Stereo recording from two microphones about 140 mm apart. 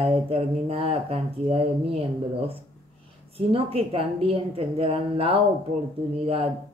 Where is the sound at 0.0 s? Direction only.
40° right (ahead or behind).